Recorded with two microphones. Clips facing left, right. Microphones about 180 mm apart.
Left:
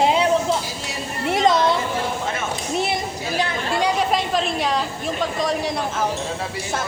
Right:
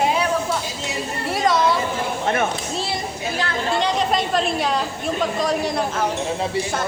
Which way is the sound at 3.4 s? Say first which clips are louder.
Even; 15° left (ahead or behind).